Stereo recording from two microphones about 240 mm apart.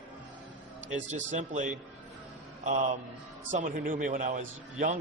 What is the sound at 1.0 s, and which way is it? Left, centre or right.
A man's voice, right.